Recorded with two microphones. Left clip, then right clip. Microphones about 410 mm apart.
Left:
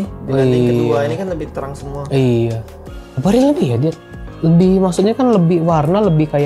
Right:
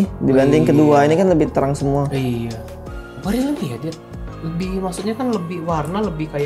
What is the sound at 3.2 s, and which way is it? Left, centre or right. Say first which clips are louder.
Speech: left 9 dB; left.